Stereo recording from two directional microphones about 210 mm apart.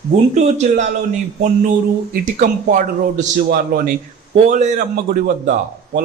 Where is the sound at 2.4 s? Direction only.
40° right (ahead or behind).